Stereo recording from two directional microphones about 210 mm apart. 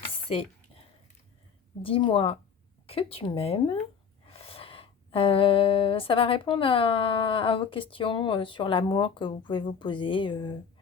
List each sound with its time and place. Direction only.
1.8 s speech: 25° left (ahead or behind)